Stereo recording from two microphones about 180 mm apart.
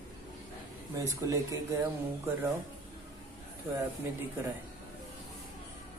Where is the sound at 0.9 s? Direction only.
15° right (ahead or behind).